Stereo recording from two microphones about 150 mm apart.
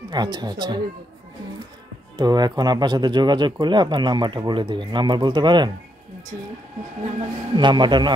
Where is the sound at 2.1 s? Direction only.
25° right (ahead or behind).